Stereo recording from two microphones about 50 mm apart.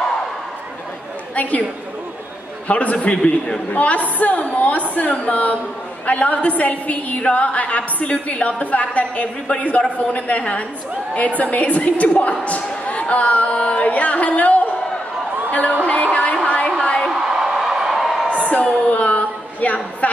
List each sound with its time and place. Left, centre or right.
1.3 s a woman's voice: left
2.7 s a woman's voice: left
3.2 s a man's voice: centre
3.7 s a woman's voice: left
15.8 s a woman's voice: left
16.8 s a sound: centre
17.1 s a sound: centre
18.6 s a man's voice: centre
18.9 s a sound: left